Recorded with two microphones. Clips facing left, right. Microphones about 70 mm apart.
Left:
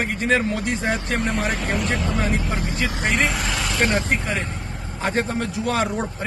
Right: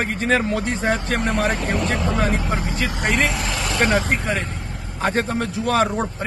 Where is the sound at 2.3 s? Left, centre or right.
Right.